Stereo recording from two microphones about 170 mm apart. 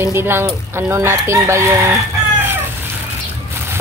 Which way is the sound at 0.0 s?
15° right (ahead or behind).